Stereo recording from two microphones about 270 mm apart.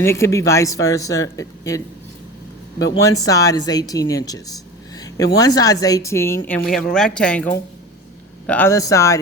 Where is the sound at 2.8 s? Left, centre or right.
Centre.